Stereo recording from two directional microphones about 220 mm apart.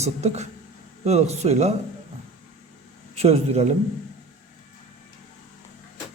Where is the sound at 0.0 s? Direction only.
30° right (ahead or behind).